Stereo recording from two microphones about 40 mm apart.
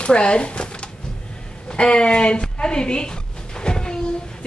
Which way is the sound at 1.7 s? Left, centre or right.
Left.